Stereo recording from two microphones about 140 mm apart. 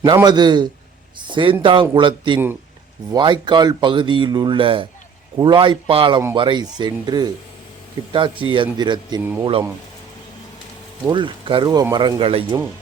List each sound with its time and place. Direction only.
0.0 s speech: 30° right (ahead or behind)
11.1 s speech: 35° right (ahead or behind)